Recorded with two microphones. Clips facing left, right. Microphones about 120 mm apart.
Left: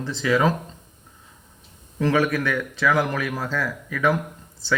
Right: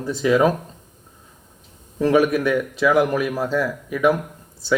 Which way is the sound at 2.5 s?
15° right (ahead or behind).